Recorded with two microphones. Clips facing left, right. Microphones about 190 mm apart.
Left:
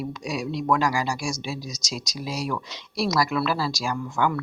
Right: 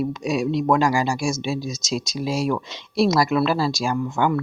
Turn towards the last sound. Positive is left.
turn(degrees=-25)  # may be behind; listen again after turning